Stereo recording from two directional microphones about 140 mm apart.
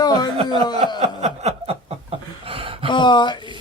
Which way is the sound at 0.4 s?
30° left (ahead or behind).